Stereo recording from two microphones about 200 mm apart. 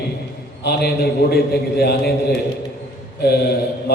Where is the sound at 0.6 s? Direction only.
55° left (ahead or behind).